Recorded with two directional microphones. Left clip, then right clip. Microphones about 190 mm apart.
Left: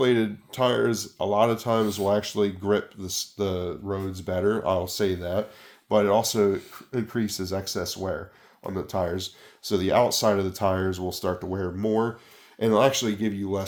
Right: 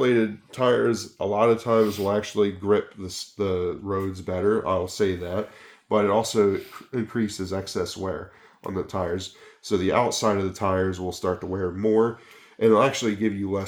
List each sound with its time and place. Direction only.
0.0 s speech: 55° left (ahead or behind)